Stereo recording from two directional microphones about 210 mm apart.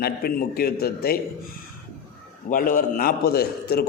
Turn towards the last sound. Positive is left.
turn(degrees=45)  # may be behind; listen again after turning